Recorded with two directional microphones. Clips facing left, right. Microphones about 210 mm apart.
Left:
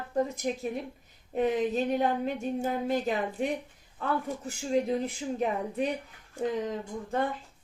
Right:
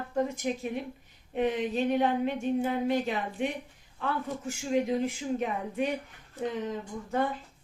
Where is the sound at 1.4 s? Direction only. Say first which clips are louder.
Left 1 dB; 40° left (ahead or behind).